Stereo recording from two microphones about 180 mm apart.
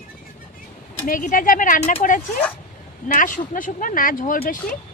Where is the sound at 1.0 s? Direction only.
50° left (ahead or behind).